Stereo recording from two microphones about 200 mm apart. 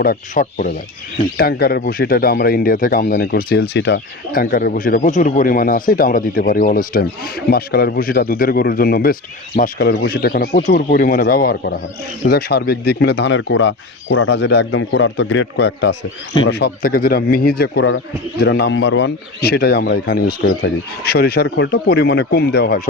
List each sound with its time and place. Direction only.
0.0 s speech: 45° left (ahead or behind)